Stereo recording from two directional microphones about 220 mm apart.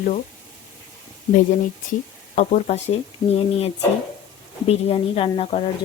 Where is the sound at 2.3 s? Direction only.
30° left (ahead or behind).